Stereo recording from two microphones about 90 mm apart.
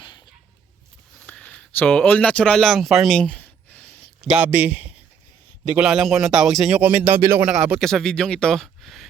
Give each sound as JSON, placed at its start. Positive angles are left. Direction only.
{"t": 1.4, "sound": "speech", "side_deg": 15}
{"t": 3.2, "sound": "a sound", "side_deg": 15}
{"t": 4.2, "sound": "speech", "side_deg": -15}
{"t": 5.9, "sound": "speech", "side_deg": -5}
{"t": 6.7, "sound": "speech", "side_deg": -20}
{"t": 7.4, "sound": "speech", "side_deg": -10}
{"t": 7.8, "sound": "speech", "side_deg": 5}